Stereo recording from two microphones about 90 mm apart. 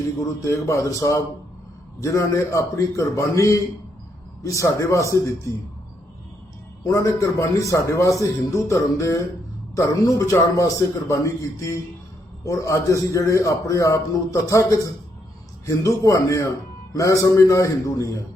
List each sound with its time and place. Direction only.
0.2 s a man's voice: 35° left (ahead or behind)
6.9 s a man's voice: 35° left (ahead or behind)